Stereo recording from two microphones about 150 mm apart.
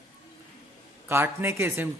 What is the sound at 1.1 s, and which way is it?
Speech, 15° right (ahead or behind).